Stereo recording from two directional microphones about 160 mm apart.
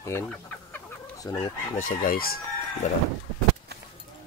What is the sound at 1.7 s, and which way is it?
Chicken, 60° left (ahead or behind).